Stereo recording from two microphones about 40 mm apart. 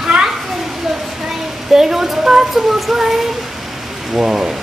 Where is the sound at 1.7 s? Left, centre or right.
Centre.